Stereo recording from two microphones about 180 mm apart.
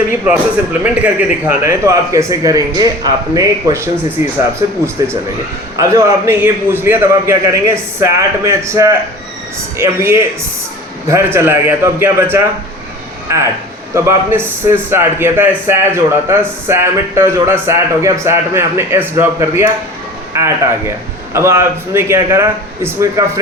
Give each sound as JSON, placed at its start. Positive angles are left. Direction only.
{"t": 0.3, "sound": "speech", "side_deg": -10}
{"t": 13.9, "sound": "speech", "side_deg": -15}